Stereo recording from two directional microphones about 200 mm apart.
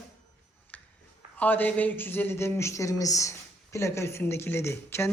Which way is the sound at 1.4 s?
10° left (ahead or behind).